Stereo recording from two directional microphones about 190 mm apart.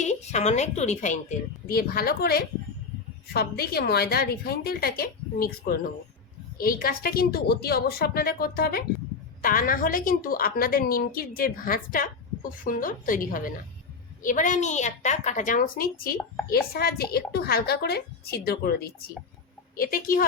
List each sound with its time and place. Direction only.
0.0 s a woman's voice: 40° left (ahead or behind)
1.6 s a woman's voice: 50° left (ahead or behind)